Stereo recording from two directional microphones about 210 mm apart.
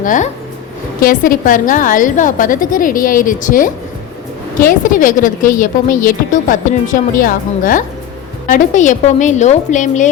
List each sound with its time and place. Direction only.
0.0 s a woman's voice: 40° left (ahead or behind)
4.9 s a woman's voice: 40° left (ahead or behind)